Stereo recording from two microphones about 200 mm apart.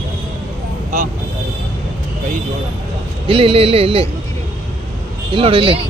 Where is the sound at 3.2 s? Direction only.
30° right (ahead or behind).